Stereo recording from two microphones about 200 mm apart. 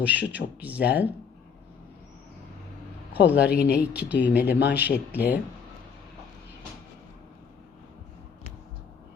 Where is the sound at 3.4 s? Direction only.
55° left (ahead or behind).